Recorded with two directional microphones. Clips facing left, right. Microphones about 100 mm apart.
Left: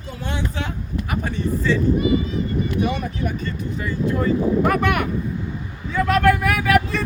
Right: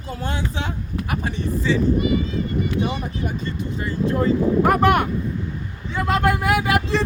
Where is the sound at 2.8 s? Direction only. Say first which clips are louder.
Left 1 dB; 25° right (ahead or behind).